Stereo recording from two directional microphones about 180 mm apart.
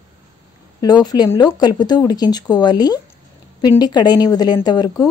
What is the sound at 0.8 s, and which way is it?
A woman's voice, 20° left (ahead or behind).